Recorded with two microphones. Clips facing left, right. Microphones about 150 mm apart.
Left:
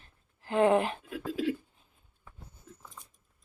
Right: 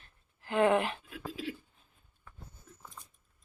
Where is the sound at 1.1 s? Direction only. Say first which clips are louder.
Left 8 dB; 65° left (ahead or behind).